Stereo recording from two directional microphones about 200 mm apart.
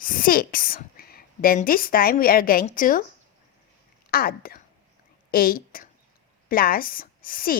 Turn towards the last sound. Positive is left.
turn(degrees=45)  # may be behind; listen again after turning